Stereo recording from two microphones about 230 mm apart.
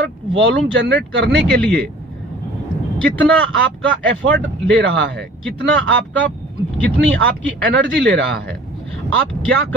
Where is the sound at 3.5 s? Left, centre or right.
Right.